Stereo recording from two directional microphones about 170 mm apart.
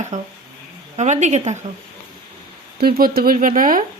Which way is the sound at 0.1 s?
45° right (ahead or behind).